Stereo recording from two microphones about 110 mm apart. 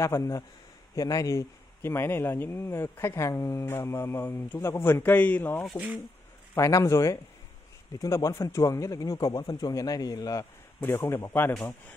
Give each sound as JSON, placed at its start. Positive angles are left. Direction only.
{"t": 0.0, "sound": "speech", "side_deg": 30}
{"t": 6.5, "sound": "speech", "side_deg": 25}
{"t": 10.8, "sound": "speech", "side_deg": 20}